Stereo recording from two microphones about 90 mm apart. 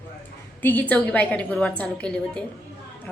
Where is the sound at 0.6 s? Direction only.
20° left (ahead or behind).